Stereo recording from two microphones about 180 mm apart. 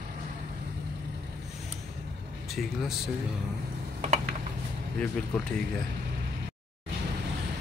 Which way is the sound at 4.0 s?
40° right (ahead or behind).